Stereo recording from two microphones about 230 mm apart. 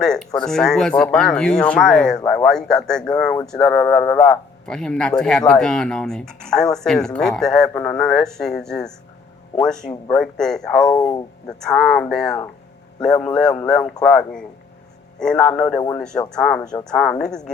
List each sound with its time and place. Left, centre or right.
0.3 s speech: centre
10.9 s speech: centre
11.4 s speech: centre